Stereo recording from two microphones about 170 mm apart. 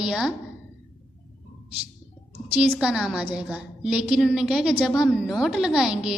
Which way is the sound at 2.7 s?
5° right (ahead or behind).